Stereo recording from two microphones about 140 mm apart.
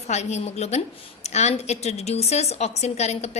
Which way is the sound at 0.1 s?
55° left (ahead or behind).